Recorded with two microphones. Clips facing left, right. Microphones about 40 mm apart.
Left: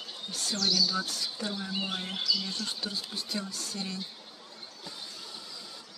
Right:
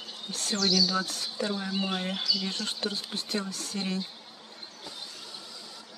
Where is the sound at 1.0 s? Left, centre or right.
Right.